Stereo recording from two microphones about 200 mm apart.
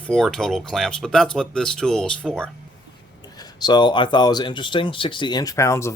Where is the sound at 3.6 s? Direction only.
20° left (ahead or behind).